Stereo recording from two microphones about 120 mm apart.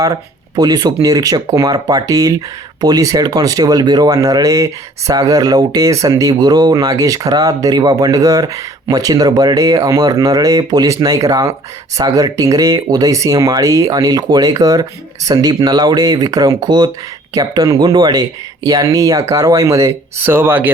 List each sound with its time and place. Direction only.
0.0 s speech: 30° right (ahead or behind); by 20.7 s 15° right (ahead or behind)